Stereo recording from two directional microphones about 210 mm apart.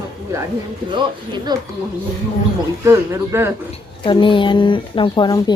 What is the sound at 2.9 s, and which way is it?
Speech, 15° right (ahead or behind).